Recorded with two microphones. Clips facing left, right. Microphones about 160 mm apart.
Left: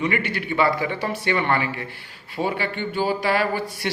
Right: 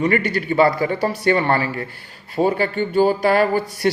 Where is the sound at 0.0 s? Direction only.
45° right (ahead or behind).